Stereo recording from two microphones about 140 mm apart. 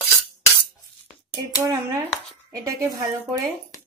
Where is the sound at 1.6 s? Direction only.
20° right (ahead or behind).